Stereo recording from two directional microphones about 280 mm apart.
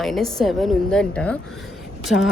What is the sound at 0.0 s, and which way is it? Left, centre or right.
A woman's voice, centre.